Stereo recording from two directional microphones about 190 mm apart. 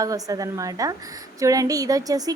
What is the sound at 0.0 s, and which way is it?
A woman's voice, 20° right (ahead or behind).